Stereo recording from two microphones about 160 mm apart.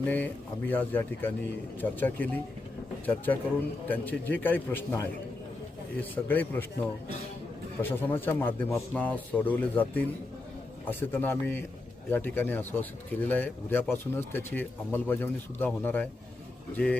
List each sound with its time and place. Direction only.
0.0 s a man's voice: 10° left (ahead or behind)
3.8 s a man's voice: 10° left (ahead or behind)
7.8 s a man's voice: 15° left (ahead or behind)